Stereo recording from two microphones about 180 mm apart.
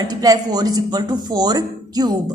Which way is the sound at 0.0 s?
20° right (ahead or behind).